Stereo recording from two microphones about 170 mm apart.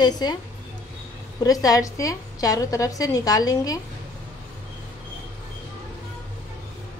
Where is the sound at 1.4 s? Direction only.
20° left (ahead or behind).